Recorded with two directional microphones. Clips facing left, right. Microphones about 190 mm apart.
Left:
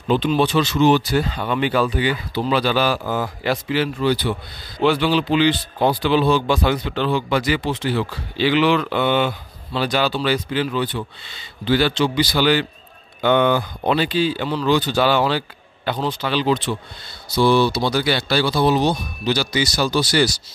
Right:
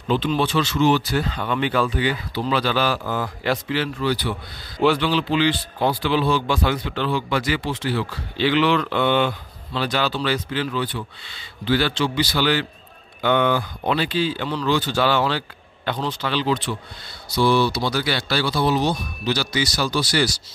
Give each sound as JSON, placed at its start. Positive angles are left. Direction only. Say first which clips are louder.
{"t": 0.1, "sound": "speech", "louder": "left 3 dB", "side_deg": 15}
{"t": 4.0, "sound": "speech", "louder": "left 3 dB", "side_deg": 25}
{"t": 4.9, "sound": "speech", "louder": "left 3 dB", "side_deg": 10}
{"t": 8.4, "sound": "speech", "louder": "left 2 dB", "side_deg": 10}